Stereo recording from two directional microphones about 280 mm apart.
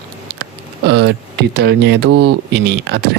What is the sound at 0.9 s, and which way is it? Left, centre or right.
Speech, right.